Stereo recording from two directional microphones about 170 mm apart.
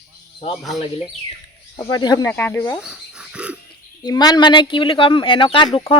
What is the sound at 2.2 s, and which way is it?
Speech, 10° left (ahead or behind).